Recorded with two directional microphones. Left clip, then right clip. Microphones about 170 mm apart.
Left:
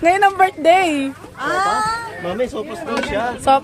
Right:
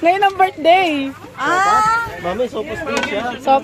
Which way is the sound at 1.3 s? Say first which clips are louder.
Right 4 dB; 45° right (ahead or behind).